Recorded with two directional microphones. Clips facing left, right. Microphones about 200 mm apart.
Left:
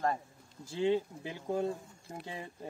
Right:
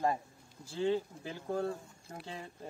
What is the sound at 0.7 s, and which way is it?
Speech, 15° left (ahead or behind).